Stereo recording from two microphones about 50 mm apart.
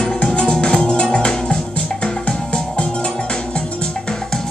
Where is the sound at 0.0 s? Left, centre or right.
Centre.